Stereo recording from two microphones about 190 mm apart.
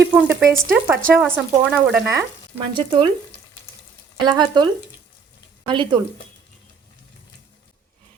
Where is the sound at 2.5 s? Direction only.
25° right (ahead or behind).